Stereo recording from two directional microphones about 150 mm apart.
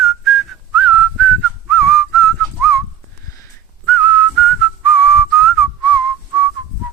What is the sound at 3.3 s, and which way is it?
Whistling, 15° left (ahead or behind).